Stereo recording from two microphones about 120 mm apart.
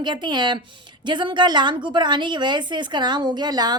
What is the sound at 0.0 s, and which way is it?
A woman's voice, 40° right (ahead or behind).